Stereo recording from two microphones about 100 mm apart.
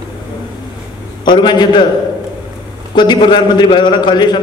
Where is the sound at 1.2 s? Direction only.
50° left (ahead or behind).